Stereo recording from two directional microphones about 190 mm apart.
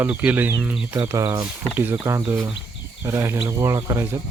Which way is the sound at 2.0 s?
25° right (ahead or behind).